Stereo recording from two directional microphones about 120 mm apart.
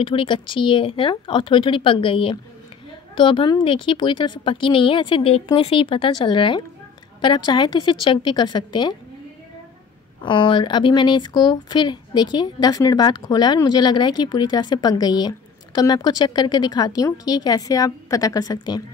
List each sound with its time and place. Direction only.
0.0 s a woman's voice: 45° left (ahead or behind)
10.2 s speech: 45° left (ahead or behind)